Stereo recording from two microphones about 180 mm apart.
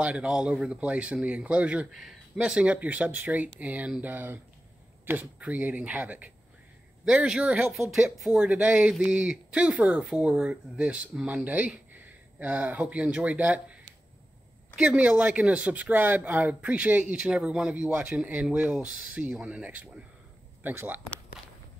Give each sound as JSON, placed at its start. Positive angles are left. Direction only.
{"t": 0.0, "sound": "speech", "side_deg": -5}
{"t": 14.8, "sound": "speech", "side_deg": -5}
{"t": 21.4, "sound": "walk", "side_deg": 0}